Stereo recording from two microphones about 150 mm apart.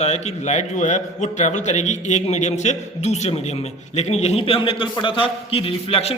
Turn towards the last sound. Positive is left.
turn(degrees=40)  # may be behind; listen again after turning